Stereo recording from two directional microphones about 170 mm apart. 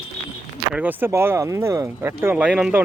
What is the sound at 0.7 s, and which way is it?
Speech, 10° right (ahead or behind).